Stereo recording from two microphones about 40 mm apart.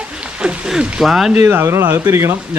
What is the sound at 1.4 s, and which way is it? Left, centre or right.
Speech, right.